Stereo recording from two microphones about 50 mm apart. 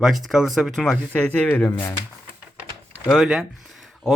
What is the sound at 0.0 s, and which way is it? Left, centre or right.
Speech, centre.